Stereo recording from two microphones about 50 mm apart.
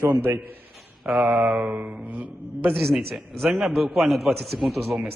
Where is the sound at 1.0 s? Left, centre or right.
Right.